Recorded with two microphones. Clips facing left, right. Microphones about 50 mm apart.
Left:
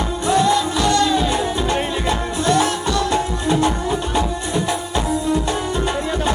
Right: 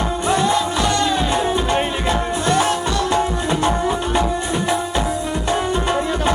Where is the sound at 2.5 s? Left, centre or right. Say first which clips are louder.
Left 1 dB; right.